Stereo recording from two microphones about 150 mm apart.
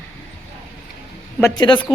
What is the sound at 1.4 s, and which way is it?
Speech, 30° left (ahead or behind).